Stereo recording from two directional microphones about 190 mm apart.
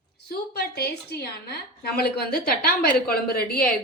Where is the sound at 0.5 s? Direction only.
55° left (ahead or behind).